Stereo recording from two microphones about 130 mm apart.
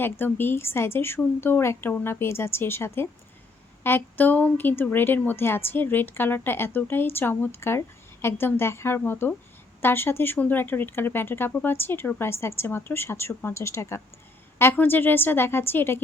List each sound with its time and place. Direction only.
0.0 s a woman's voice: 15° left (ahead or behind)